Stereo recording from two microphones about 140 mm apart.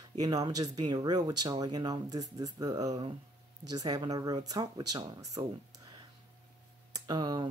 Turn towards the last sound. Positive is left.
turn(degrees=-30)  # may be behind; listen again after turning